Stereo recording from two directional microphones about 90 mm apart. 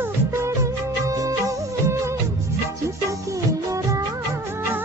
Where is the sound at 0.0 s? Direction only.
30° right (ahead or behind).